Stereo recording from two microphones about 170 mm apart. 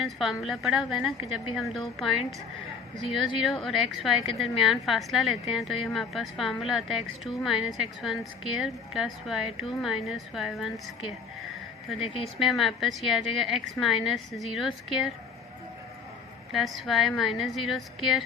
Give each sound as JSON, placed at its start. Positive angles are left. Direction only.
{"t": 0.0, "sound": "a woman's voice", "side_deg": 0}
{"t": 3.2, "sound": "a woman's voice", "side_deg": 0}
{"t": 11.9, "sound": "a woman's voice", "side_deg": 35}
{"t": 12.2, "sound": "a woman's voice", "side_deg": 0}
{"t": 16.5, "sound": "a woman's voice", "side_deg": 0}